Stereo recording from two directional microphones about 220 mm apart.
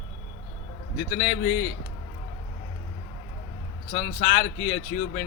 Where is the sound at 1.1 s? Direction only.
45° left (ahead or behind).